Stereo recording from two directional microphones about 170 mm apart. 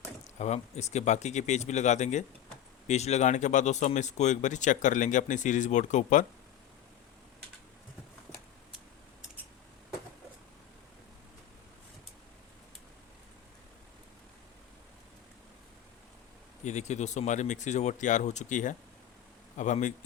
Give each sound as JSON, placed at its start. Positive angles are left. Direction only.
{"t": 0.3, "sound": "speech", "side_deg": 40}
{"t": 16.6, "sound": "speech", "side_deg": 45}